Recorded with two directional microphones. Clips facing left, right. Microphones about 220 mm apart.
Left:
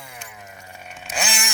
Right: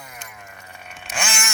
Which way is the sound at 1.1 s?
35° left (ahead or behind).